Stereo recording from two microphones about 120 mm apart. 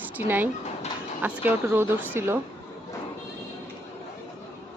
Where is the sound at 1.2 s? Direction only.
15° right (ahead or behind).